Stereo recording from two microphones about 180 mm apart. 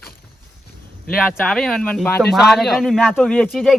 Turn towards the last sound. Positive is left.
turn(degrees=5)  # may be behind; listen again after turning